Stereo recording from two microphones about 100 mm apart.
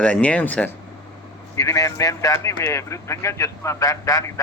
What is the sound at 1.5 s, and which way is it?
A man's voice, 35° left (ahead or behind).